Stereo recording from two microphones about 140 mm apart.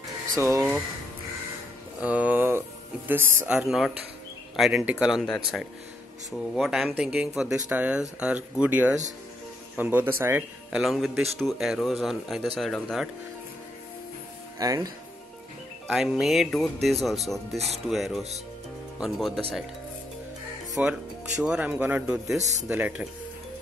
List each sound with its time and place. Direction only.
0.4 s speech: 20° right (ahead or behind)
2.0 s speech: 10° right (ahead or behind)
3.4 s speech: 5° right (ahead or behind)
10.8 s speech: centre (ahead or behind)
14.6 s speech: 25° right (ahead or behind)
15.9 s speech: centre (ahead or behind)
20.8 s speech: 10° right (ahead or behind)
22.4 s speech: 55° right (ahead or behind)
22.7 s speech: 10° right (ahead or behind)